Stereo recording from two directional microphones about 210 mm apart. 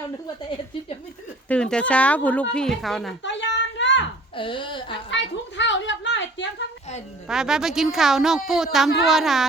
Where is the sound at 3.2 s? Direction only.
60° left (ahead or behind).